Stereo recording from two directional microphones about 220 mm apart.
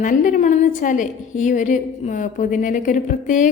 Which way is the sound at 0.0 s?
35° left (ahead or behind).